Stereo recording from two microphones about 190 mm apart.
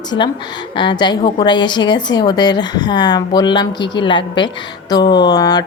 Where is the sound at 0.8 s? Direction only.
25° left (ahead or behind).